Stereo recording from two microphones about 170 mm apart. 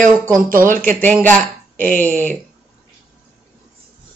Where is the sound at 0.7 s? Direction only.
50° right (ahead or behind).